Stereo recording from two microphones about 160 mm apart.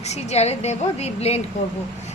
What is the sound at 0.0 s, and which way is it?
A woman's voice, 45° left (ahead or behind).